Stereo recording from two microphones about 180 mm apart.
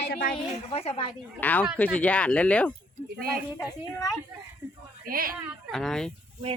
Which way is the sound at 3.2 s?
55° right (ahead or behind).